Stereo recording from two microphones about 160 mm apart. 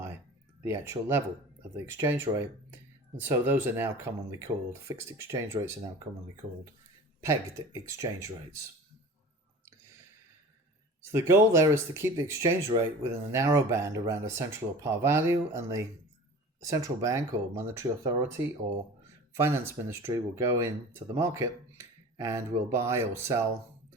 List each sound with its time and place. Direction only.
0.6 s speech: 15° right (ahead or behind)
7.2 s speech: 15° right (ahead or behind)
11.0 s speech: 15° right (ahead or behind)